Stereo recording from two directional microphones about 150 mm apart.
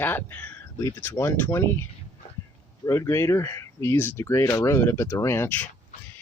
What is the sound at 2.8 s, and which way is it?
Speech, 20° left (ahead or behind).